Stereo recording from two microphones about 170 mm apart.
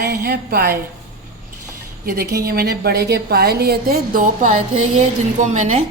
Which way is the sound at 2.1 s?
60° right (ahead or behind).